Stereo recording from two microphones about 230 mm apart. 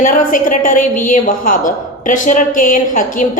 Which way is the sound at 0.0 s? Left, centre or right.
Left.